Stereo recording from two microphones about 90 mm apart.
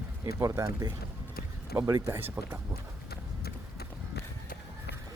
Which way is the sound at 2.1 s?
25° right (ahead or behind).